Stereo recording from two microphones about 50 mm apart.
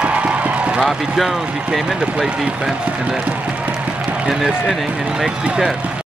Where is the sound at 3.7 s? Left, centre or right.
Right.